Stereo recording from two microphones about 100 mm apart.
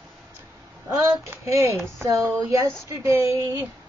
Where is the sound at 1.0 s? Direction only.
30° right (ahead or behind).